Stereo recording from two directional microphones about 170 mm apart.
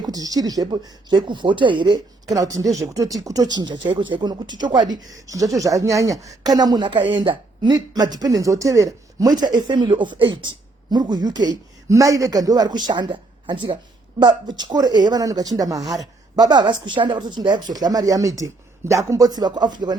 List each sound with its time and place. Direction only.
0.1 s speech: 20° right (ahead or behind)